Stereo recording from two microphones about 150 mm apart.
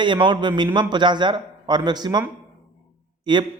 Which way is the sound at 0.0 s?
30° right (ahead or behind).